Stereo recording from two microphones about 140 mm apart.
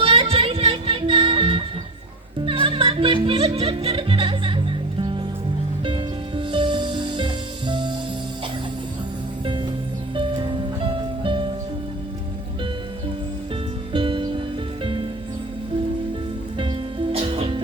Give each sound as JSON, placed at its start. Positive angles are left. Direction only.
{"t": 0.0, "sound": "music", "side_deg": -40}
{"t": 2.6, "sound": "music", "side_deg": -40}
{"t": 10.2, "sound": "music", "side_deg": -35}
{"t": 13.9, "sound": "music", "side_deg": -35}
{"t": 16.6, "sound": "music", "side_deg": -40}